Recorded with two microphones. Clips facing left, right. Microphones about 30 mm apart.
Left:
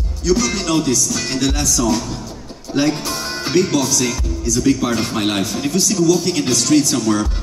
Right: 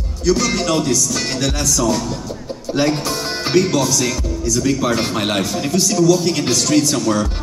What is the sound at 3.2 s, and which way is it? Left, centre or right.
Music, centre.